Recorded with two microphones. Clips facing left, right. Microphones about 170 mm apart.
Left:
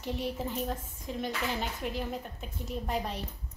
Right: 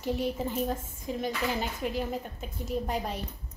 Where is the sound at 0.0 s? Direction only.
Centre (ahead or behind).